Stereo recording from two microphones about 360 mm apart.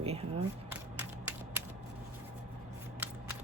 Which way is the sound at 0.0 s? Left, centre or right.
Centre.